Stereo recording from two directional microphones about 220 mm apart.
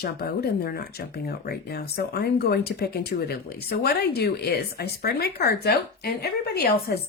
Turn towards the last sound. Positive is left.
turn(degrees=45)  # may be behind; listen again after turning